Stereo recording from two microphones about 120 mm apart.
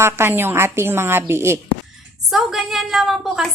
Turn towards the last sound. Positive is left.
turn(degrees=0)  # may be behind; listen again after turning